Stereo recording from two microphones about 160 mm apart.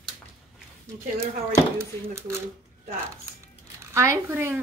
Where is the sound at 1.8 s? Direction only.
15° right (ahead or behind).